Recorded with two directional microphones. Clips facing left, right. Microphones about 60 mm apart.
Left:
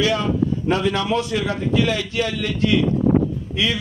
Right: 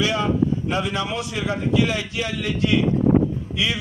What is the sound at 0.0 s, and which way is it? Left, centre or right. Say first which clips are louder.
A man's voice: left 1 dB; right.